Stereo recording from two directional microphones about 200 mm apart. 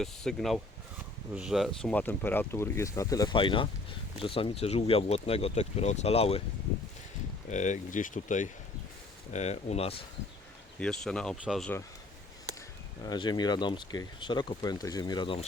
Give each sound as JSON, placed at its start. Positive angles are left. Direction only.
{"t": 0.0, "sound": "speech", "side_deg": 0}
{"t": 7.5, "sound": "speech", "side_deg": 35}
{"t": 10.8, "sound": "speech", "side_deg": 5}
{"t": 13.0, "sound": "speech", "side_deg": 20}